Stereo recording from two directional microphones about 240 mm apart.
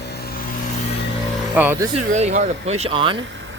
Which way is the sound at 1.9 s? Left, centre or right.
Right.